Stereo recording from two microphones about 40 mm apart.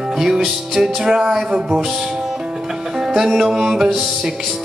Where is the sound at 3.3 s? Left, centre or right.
Centre.